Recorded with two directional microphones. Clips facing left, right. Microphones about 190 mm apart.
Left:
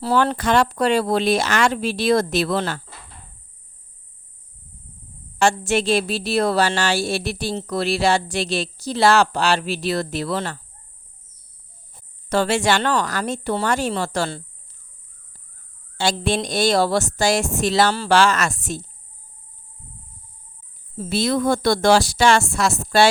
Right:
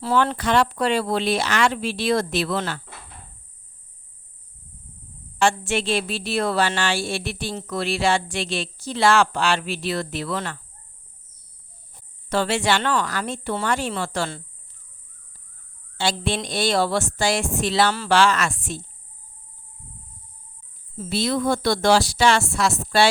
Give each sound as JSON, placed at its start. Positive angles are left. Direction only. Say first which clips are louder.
{"t": 0.0, "sound": "a woman's voice", "louder": "left 2 dB", "side_deg": 35}
{"t": 5.4, "sound": "a woman's voice", "louder": "left 3 dB", "side_deg": 40}
{"t": 12.3, "sound": "a woman's voice", "louder": "left 3 dB", "side_deg": 45}
{"t": 16.0, "sound": "a woman's voice", "louder": "left 3 dB", "side_deg": 45}
{"t": 21.0, "sound": "speech", "louder": "left 3 dB", "side_deg": 50}